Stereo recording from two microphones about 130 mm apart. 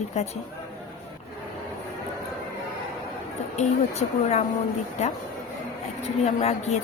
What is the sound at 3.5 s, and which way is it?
Speech, 60° left (ahead or behind).